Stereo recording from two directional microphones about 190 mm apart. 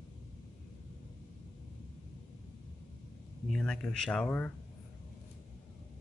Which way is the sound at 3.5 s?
5° left (ahead or behind).